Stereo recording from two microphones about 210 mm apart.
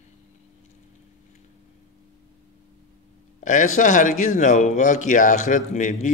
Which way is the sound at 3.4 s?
35° left (ahead or behind).